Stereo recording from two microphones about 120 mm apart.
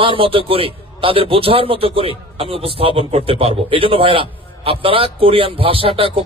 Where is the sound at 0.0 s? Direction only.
50° right (ahead or behind).